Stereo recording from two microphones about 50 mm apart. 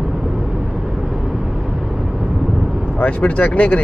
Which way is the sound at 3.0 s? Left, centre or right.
Left.